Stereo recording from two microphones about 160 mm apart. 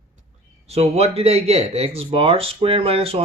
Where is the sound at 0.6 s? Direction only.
40° right (ahead or behind).